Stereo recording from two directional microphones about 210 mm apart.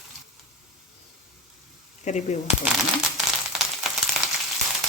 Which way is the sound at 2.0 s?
35° left (ahead or behind).